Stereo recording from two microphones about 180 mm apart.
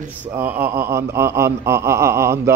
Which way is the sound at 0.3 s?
10° right (ahead or behind).